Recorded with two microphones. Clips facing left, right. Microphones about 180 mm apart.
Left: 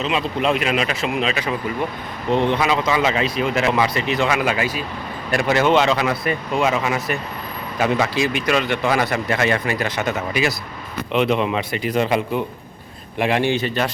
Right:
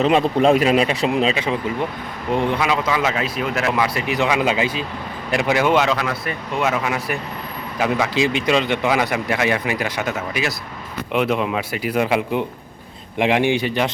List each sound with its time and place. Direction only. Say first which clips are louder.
0.0 s speech: right 6 dB; 45° right (ahead or behind); by 1.5 s 25° right (ahead or behind)
2.3 s speech: left 1 dB; 10° right (ahead or behind)
8.1 s speech: right 2 dB; 20° right (ahead or behind)